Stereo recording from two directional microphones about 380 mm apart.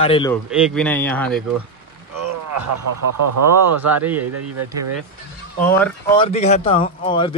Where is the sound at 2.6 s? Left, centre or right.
Right.